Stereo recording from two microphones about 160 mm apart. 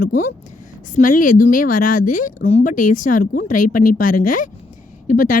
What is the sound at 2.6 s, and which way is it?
Speech, 55° left (ahead or behind).